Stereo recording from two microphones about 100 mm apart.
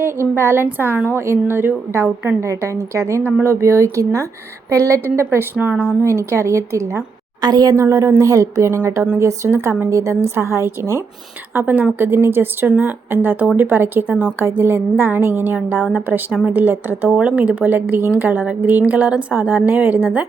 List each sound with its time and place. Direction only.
0.0 s speech: 25° right (ahead or behind)
7.4 s speech: 40° right (ahead or behind)
11.5 s a woman's voice: 15° right (ahead or behind)